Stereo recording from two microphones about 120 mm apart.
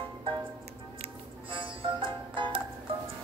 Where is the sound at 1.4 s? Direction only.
45° right (ahead or behind).